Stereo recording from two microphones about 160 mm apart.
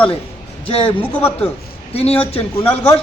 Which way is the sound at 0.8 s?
10° left (ahead or behind).